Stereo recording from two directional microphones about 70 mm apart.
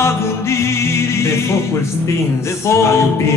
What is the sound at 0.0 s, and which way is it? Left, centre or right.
Music, left.